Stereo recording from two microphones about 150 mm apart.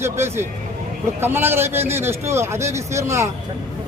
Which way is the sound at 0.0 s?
15° right (ahead or behind).